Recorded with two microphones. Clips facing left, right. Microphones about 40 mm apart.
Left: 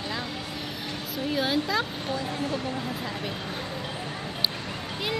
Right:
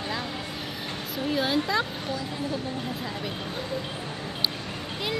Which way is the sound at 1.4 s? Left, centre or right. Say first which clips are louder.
Right 1 dB; centre.